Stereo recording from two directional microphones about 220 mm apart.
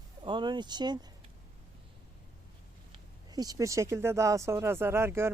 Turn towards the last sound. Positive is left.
turn(degrees=-10)  # may be behind; listen again after turning